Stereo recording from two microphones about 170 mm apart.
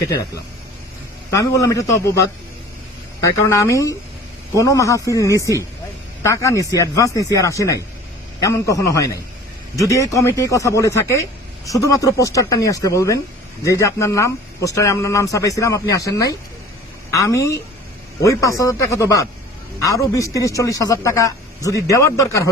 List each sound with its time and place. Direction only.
1.3 s speech: 20° left (ahead or behind)